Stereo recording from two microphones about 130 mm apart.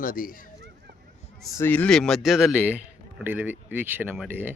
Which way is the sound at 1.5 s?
15° left (ahead or behind).